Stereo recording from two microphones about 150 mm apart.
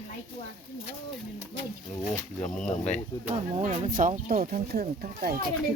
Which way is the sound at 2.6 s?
50° left (ahead or behind).